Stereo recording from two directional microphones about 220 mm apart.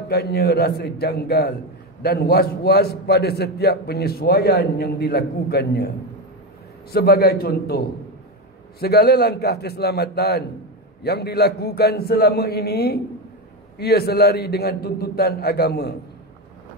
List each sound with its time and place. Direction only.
0.1 s a man's voice: 45° left (ahead or behind)
6.9 s a man's voice: 45° left (ahead or behind)